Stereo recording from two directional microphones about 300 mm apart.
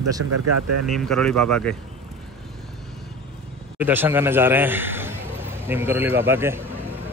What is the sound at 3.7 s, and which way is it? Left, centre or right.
A man's voice, centre.